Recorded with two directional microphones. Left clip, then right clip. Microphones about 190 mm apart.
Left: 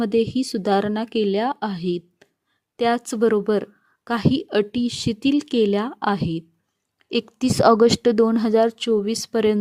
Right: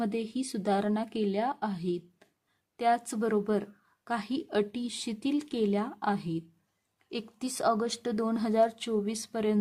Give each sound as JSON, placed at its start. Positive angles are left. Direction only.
{"t": 0.0, "sound": "a woman's voice", "side_deg": 30}